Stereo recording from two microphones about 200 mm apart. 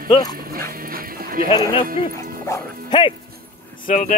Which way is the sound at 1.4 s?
20° left (ahead or behind).